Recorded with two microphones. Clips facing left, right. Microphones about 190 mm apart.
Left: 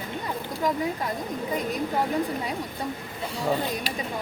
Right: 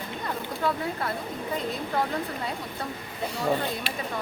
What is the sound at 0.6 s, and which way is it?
Speech, 15° left (ahead or behind).